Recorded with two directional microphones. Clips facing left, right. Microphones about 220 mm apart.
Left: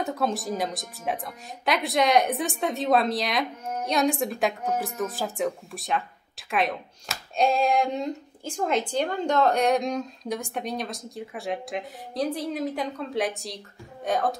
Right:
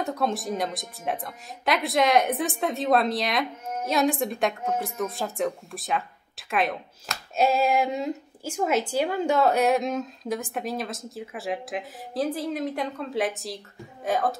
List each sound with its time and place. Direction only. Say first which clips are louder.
0.0 s speech: even; centre (ahead or behind)